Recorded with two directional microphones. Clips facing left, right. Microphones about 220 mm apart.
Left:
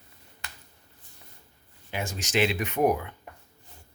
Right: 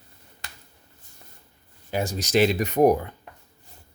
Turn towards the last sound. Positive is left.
turn(degrees=-35)  # may be behind; listen again after turning